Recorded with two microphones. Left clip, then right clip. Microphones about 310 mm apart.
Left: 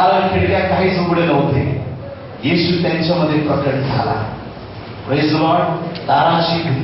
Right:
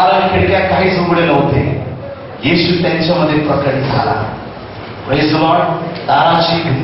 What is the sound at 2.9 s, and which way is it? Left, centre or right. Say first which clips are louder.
Speech: right 4 dB; centre.